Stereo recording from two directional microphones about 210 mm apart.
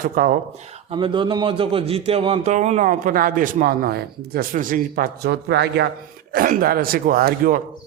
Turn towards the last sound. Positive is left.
turn(degrees=-40)  # may be behind; listen again after turning